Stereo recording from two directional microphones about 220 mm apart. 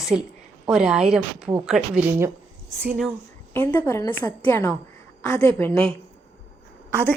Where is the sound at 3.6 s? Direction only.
10° left (ahead or behind).